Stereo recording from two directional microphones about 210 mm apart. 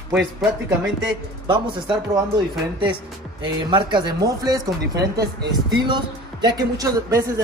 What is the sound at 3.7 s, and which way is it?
Speech, 20° right (ahead or behind).